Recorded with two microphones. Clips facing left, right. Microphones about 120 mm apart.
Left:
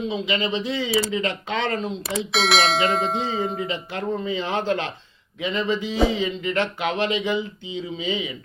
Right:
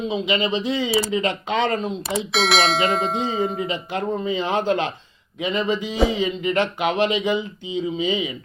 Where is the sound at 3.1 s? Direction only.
15° right (ahead or behind).